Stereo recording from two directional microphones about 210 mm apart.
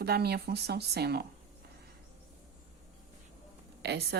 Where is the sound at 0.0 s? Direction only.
50° right (ahead or behind).